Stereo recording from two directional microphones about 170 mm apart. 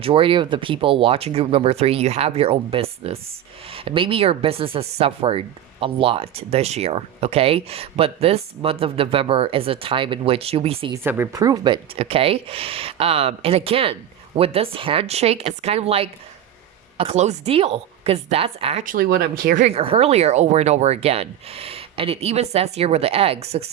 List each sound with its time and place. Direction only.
0.0 s speech: 30° right (ahead or behind)
10.9 s speech: 15° right (ahead or behind); by 18.9 s 35° right (ahead or behind)
18.9 s speech: 60° right (ahead or behind)
19.6 s speech: 35° right (ahead or behind)